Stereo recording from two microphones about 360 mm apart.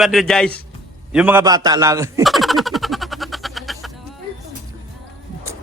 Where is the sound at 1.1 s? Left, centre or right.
Centre.